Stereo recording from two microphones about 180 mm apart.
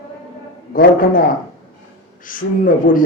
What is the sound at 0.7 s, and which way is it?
Speech, 50° left (ahead or behind).